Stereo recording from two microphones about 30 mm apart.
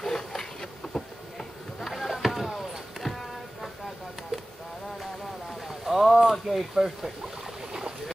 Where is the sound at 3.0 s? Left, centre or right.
Centre.